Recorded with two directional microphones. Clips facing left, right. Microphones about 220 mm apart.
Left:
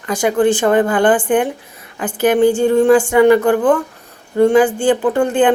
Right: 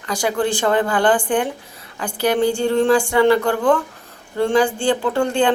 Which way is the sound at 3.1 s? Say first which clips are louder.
Left 5 dB; 15° left (ahead or behind).